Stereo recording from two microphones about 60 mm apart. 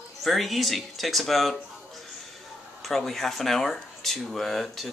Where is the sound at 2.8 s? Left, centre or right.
Centre.